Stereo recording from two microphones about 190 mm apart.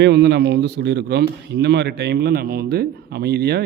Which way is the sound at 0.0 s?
60° right (ahead or behind).